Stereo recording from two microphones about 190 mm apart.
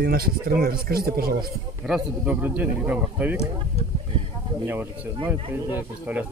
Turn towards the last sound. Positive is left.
turn(degrees=-10)  # may be behind; listen again after turning